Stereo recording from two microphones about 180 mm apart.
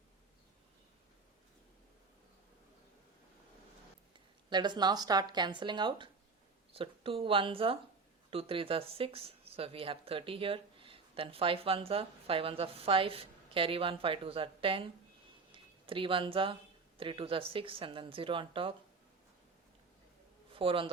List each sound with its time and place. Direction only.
4.1 s a woman's voice: 25° right (ahead or behind)
20.5 s a man's voice: 30° right (ahead or behind)